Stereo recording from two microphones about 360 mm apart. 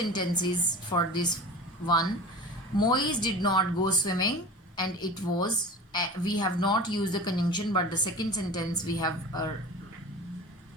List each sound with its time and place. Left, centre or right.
0.0 s a woman's voice: centre
2.7 s a woman's voice: centre